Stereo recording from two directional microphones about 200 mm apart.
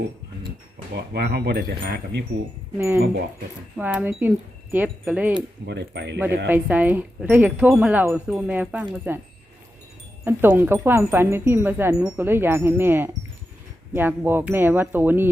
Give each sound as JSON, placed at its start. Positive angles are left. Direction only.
{"t": 0.9, "sound": "speech", "side_deg": -55}
{"t": 2.7, "sound": "speech", "side_deg": -10}
{"t": 5.6, "sound": "speech", "side_deg": -60}
{"t": 6.5, "sound": "speech", "side_deg": -10}
{"t": 10.2, "sound": "speech", "side_deg": -10}